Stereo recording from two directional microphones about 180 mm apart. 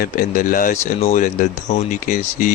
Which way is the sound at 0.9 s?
35° left (ahead or behind).